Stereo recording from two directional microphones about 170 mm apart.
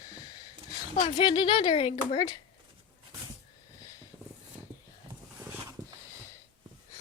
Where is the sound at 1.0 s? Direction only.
30° left (ahead or behind).